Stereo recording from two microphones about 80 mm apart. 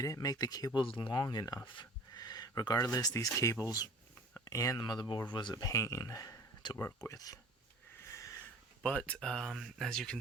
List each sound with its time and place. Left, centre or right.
0.0 s speech: left
0.8 s speech: left
1.6 s speech: left
4.8 s speech: left
5.6 s speech: left
8.1 s sniff: left
8.8 s speech: centre